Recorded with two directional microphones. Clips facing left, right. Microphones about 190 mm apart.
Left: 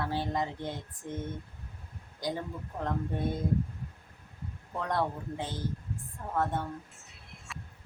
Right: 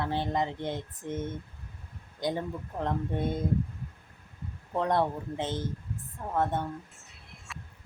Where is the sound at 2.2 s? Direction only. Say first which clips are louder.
Right 3 dB; 20° right (ahead or behind).